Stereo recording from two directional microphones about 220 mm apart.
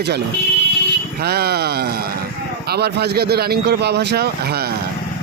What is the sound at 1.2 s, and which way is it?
A man's voice, 45° right (ahead or behind).